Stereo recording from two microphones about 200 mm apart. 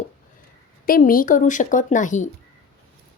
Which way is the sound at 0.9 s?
45° left (ahead or behind).